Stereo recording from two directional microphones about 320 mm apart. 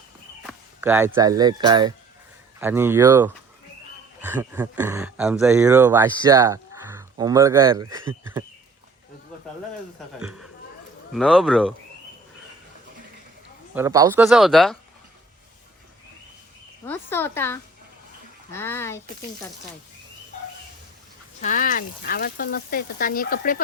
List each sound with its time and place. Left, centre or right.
0.4 s speech: centre
10.2 s speech: centre
13.7 s speech: centre
16.8 s speech: centre
21.4 s speech: left